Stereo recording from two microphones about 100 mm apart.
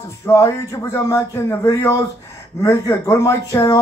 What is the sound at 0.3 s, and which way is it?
Speech, 30° left (ahead or behind).